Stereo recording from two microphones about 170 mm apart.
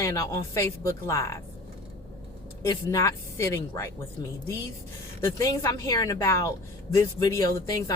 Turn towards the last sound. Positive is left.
turn(degrees=20)  # may be behind; listen again after turning